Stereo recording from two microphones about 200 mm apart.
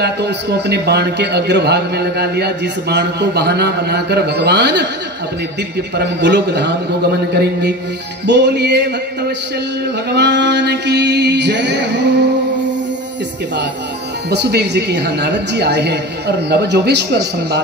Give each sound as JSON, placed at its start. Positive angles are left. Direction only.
{"t": 0.0, "sound": "a man's voice", "side_deg": -55}
{"t": 5.9, "sound": "a man's voice", "side_deg": -60}
{"t": 10.1, "sound": "a man's voice", "side_deg": -60}
{"t": 14.3, "sound": "a man's voice", "side_deg": -55}